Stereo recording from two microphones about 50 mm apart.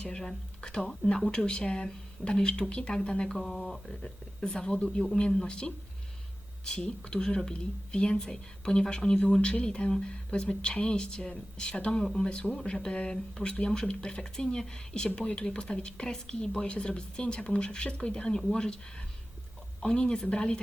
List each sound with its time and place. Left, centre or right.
0.0 s speech: centre
3.3 s speech: centre
19.8 s speech: centre